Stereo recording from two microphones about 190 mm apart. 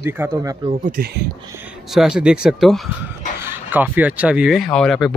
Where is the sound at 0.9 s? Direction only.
55° right (ahead or behind).